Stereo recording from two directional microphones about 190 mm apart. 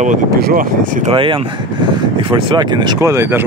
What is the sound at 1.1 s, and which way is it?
Speech, 25° right (ahead or behind).